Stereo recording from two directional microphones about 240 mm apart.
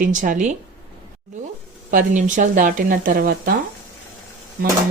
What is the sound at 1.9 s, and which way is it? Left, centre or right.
Speech, right.